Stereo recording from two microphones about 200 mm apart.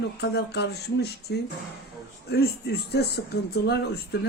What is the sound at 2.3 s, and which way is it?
Speech, 50° left (ahead or behind).